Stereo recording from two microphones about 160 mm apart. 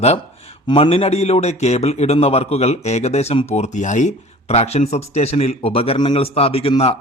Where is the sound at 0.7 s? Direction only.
35° left (ahead or behind).